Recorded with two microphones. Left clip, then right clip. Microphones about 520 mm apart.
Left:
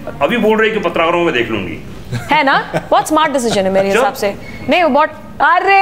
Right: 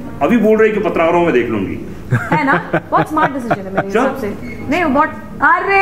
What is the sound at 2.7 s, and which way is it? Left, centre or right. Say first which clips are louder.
Speech: right 2 dB; right.